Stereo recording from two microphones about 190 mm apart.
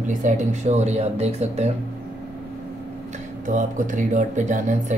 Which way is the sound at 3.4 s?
40° right (ahead or behind).